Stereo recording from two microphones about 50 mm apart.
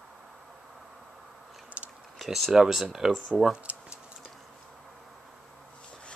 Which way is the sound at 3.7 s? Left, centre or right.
Right.